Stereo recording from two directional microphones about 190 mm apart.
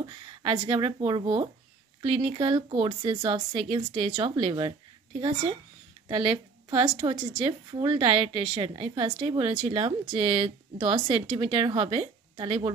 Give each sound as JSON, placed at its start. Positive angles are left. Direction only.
{"t": 0.0, "sound": "a woman's voice", "side_deg": -25}